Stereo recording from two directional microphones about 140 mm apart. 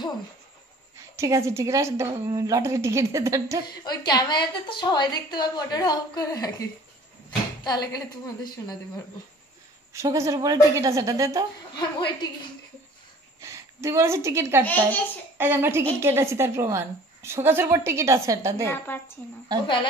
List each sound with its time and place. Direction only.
0.9 s a woman's voice: 20° right (ahead or behind)
3.8 s a woman's voice: 30° left (ahead or behind)
9.9 s a woman's voice: 20° right (ahead or behind)
11.7 s a woman's voice: 30° left (ahead or behind)
13.4 s a woman's voice: 20° right (ahead or behind)
14.6 s a woman's voice: 10° left (ahead or behind)
15.3 s a woman's voice: 15° right (ahead or behind)
18.7 s a woman's voice: 15° left (ahead or behind)